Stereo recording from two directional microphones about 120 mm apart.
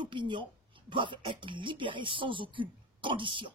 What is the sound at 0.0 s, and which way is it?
Speech, 40° right (ahead or behind).